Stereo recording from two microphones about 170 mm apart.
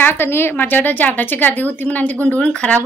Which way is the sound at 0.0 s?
15° left (ahead or behind).